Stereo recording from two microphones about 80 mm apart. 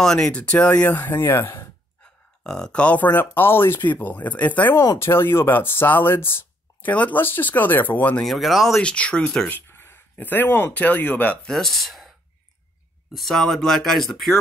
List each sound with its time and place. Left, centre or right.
0.0 s speech: centre
1.1 s speech: left
2.4 s speech: centre
4.9 s speech: left
6.9 s speech: centre
8.2 s speech: centre
8.8 s speech: centre
9.5 s speech: left
11.4 s speech: centre
13.1 s speech: centre